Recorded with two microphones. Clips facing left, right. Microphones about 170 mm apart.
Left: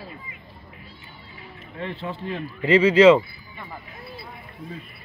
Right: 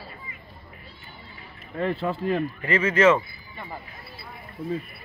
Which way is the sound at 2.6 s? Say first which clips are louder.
Left 10 dB; 10° left (ahead or behind).